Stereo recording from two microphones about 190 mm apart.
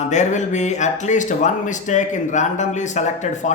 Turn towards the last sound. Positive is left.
turn(degrees=40)  # may be behind; listen again after turning